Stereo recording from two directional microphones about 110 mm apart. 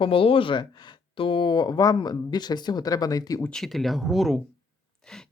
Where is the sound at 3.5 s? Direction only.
5° left (ahead or behind).